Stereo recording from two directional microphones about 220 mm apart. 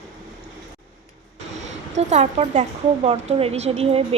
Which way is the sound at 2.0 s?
30° right (ahead or behind).